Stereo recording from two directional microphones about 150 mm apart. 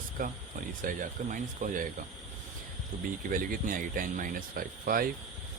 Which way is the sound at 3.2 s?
70° right (ahead or behind).